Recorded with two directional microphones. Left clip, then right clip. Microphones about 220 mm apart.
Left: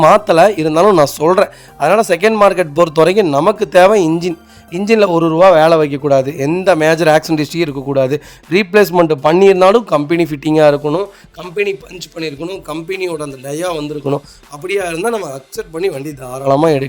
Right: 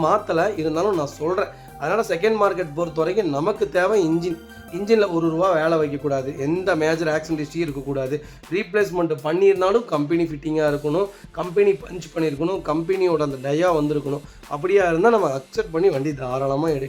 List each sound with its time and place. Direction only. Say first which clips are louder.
0.0 s speech: left 12 dB; 45° left (ahead or behind)
13.1 s speech: right 1 dB; centre (ahead or behind)
14.1 s speech: left 10 dB; 45° left (ahead or behind)
15.0 s speech: right 1 dB; centre (ahead or behind)
16.5 s speech: left 14 dB; 45° left (ahead or behind)